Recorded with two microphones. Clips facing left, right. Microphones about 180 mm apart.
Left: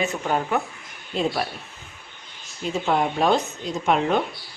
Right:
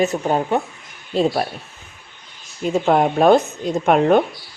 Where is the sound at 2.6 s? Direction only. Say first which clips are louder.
Right 6 dB; 50° right (ahead or behind).